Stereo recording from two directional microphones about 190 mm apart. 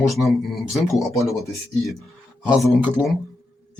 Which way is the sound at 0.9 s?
15° left (ahead or behind).